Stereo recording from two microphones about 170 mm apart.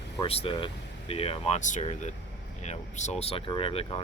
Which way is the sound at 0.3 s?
35° left (ahead or behind).